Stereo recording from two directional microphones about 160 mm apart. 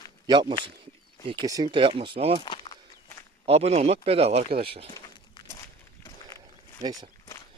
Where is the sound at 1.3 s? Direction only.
25° right (ahead or behind).